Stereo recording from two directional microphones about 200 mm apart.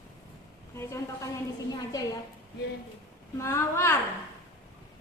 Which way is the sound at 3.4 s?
15° left (ahead or behind).